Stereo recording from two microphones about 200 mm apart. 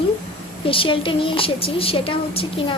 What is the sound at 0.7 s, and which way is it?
A woman's voice, 25° left (ahead or behind).